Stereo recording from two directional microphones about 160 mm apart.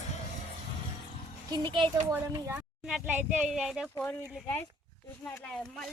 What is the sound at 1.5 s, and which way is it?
Speech, 30° right (ahead or behind).